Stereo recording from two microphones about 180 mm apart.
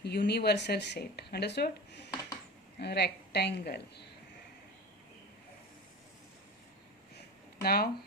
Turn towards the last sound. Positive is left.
turn(degrees=60)  # may be behind; listen again after turning